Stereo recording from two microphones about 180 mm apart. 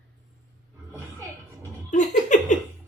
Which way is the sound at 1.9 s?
45° left (ahead or behind).